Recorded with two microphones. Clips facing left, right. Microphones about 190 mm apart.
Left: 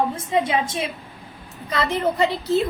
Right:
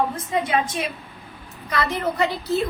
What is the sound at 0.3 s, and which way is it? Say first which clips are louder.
A woman's voice: left 1 dB; 25° left (ahead or behind).